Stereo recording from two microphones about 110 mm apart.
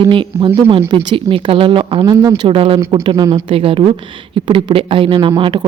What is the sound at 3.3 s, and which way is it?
A woman's voice, 55° right (ahead or behind).